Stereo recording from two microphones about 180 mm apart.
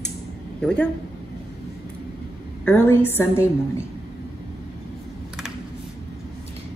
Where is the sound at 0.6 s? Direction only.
5° left (ahead or behind).